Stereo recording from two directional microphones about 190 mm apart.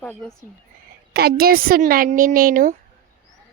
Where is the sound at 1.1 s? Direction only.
55° right (ahead or behind).